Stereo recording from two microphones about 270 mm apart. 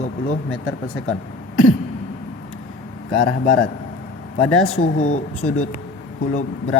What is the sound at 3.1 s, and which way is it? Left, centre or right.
Speech, left.